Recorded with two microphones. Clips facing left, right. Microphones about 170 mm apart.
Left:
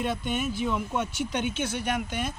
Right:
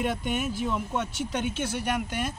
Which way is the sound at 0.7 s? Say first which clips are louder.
Left 1 dB; centre (ahead or behind).